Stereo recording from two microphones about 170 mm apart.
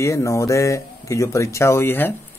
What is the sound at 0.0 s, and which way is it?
Speech, 20° left (ahead or behind).